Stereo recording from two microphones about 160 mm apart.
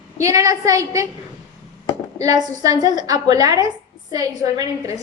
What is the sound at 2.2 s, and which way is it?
A woman's voice, 20° right (ahead or behind).